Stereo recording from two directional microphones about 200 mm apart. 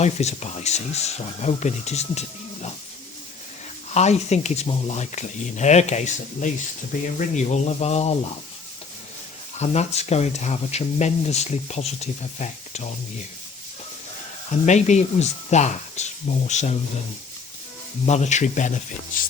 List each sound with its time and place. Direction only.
0.0 s speech: 35° left (ahead or behind)
3.9 s speech: 35° left (ahead or behind)
9.6 s speech: 35° left (ahead or behind)
14.7 s speech: 35° left (ahead or behind)
18.0 s speech: 35° left (ahead or behind)